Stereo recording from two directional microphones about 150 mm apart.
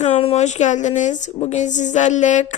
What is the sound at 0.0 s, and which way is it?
A woman's voice, 45° left (ahead or behind).